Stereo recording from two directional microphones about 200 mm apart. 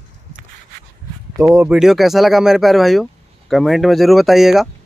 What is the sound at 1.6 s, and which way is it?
Speech, 5° right (ahead or behind).